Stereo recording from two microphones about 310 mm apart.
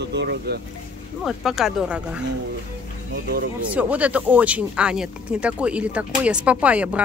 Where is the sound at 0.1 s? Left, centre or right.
Right.